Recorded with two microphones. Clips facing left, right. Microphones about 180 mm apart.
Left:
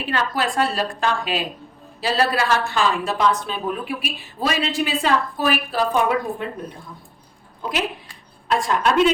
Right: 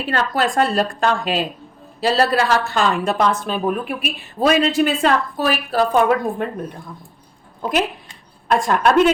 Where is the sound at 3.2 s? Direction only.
50° right (ahead or behind).